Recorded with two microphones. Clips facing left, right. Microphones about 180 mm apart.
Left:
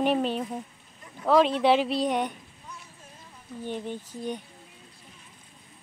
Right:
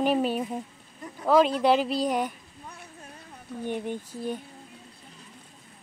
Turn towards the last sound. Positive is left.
turn(degrees=-10)  # may be behind; listen again after turning